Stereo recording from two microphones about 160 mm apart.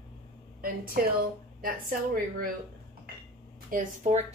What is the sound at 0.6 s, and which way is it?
A woman's voice, 65° right (ahead or behind).